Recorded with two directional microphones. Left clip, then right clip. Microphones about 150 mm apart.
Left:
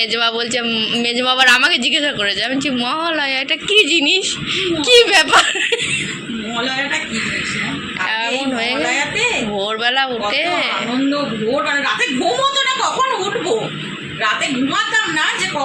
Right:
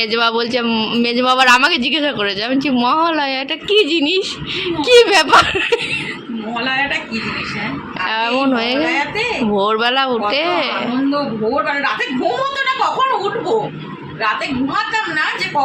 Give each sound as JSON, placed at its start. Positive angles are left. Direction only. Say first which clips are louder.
{"t": 0.0, "sound": "a man's voice", "louder": "right 1 dB", "side_deg": -45}
{"t": 3.7, "sound": "a man's voice", "louder": "left 1 dB", "side_deg": -35}
{"t": 8.2, "sound": "a man's voice", "louder": "right 3 dB", "side_deg": -50}